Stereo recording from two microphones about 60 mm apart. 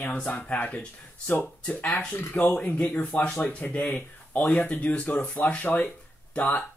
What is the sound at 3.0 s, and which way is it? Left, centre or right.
Speech, centre.